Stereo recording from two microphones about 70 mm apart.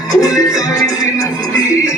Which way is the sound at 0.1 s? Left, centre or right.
Left.